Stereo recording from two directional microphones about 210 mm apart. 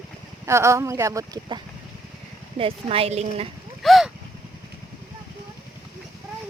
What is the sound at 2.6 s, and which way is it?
Speech, 25° right (ahead or behind).